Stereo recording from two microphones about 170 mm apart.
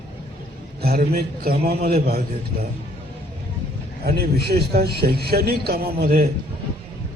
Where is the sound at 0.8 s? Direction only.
60° right (ahead or behind).